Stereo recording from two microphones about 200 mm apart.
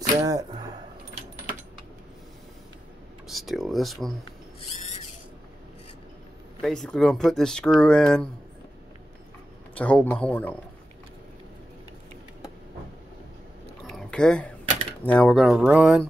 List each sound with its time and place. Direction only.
0.2 s speech: 15° right (ahead or behind)
3.3 s speech: centre (ahead or behind)
6.6 s speech: centre (ahead or behind)
9.8 s speech: 5° left (ahead or behind)
13.9 s a sound: 5° left (ahead or behind)
15.0 s speech: 5° left (ahead or behind)